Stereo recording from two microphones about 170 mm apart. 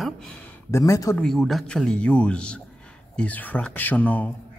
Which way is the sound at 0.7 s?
20° left (ahead or behind).